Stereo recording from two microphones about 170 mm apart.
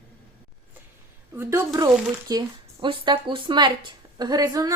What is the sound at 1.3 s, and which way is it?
A woman's voice, 15° right (ahead or behind).